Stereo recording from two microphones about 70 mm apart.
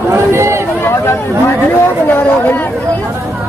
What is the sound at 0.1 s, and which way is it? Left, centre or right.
Run, right.